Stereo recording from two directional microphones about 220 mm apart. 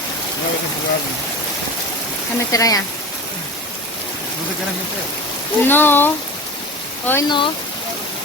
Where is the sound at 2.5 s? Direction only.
15° left (ahead or behind).